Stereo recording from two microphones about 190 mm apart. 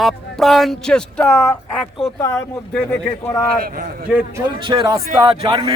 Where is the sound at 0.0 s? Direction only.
Centre (ahead or behind).